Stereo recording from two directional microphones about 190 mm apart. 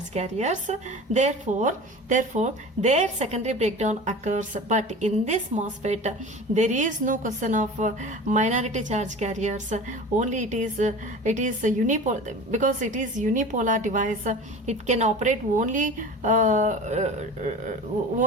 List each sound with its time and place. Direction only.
0.1 s speech: 35° right (ahead or behind)